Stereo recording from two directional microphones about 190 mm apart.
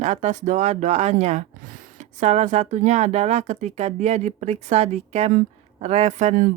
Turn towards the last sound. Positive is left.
turn(degrees=-40)  # may be behind; listen again after turning